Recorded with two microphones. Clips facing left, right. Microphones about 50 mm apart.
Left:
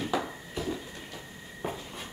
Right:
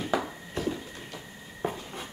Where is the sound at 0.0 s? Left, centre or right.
Centre.